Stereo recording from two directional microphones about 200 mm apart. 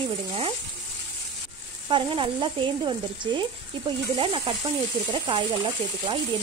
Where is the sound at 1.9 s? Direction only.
25° right (ahead or behind).